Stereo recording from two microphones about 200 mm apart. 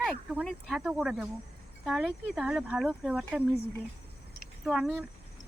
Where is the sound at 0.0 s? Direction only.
Centre (ahead or behind).